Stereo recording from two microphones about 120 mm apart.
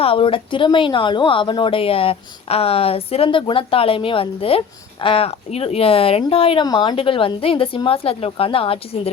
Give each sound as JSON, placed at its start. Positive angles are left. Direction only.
{"t": 0.0, "sound": "a woman's voice", "side_deg": 50}